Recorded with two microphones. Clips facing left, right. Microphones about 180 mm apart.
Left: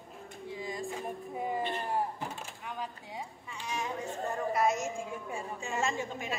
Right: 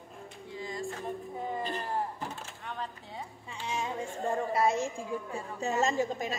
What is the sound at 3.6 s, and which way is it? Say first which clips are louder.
A woman's voice: right 2 dB; 25° right (ahead or behind).